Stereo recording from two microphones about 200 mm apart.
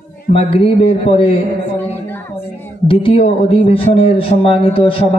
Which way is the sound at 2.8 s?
30° left (ahead or behind).